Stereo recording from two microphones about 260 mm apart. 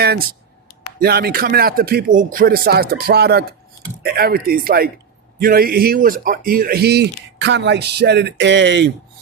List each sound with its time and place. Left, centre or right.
0.9 s a man's voice: right